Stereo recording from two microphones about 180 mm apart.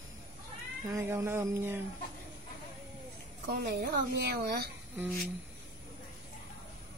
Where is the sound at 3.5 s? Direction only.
60° right (ahead or behind).